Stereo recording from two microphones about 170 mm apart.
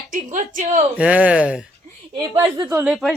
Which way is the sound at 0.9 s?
10° right (ahead or behind).